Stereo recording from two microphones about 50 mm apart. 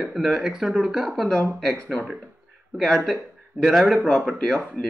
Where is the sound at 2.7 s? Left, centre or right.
Centre.